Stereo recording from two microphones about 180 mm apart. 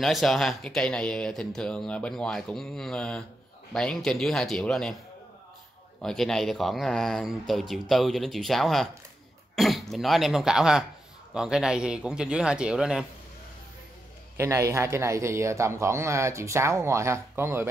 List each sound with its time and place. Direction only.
0.0 s speech: centre (ahead or behind)
6.0 s speech: centre (ahead or behind)
14.3 s a man's voice: 15° right (ahead or behind)